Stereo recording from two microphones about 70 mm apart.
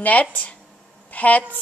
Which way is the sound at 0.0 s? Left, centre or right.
Left.